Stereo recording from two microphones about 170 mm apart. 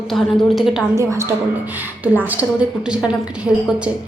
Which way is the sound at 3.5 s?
5° left (ahead or behind).